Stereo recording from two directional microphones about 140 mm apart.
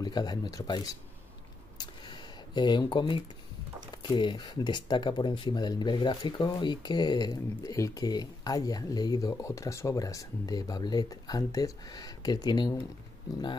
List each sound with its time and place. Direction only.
0.0 s speech: 30° left (ahead or behind)
1.8 s a sound: 30° left (ahead or behind)
3.9 s speech: 30° left (ahead or behind)